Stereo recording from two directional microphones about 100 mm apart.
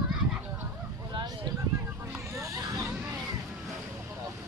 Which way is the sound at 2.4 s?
35° right (ahead or behind).